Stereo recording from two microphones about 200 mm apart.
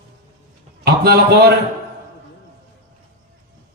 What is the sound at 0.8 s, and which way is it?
Speech, 55° right (ahead or behind).